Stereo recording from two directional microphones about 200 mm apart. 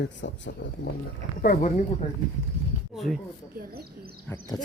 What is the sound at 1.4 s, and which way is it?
Speech, 40° left (ahead or behind).